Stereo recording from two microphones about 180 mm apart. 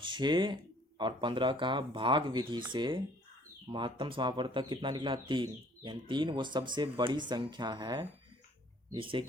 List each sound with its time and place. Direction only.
0.0 s speech: 25° right (ahead or behind)